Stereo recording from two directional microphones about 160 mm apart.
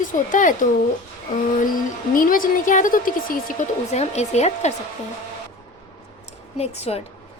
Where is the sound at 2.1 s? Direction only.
60° left (ahead or behind).